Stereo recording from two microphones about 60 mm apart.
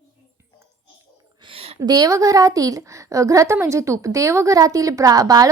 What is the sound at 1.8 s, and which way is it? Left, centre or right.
A woman's voice, right.